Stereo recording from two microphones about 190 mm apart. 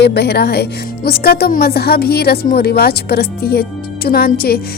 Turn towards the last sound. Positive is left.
turn(degrees=55)  # may be behind; listen again after turning